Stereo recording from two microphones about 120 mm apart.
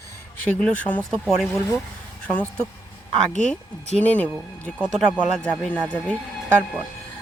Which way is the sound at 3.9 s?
10° left (ahead or behind).